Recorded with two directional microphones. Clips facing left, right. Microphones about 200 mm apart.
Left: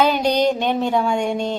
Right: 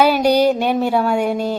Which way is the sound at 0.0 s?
10° right (ahead or behind).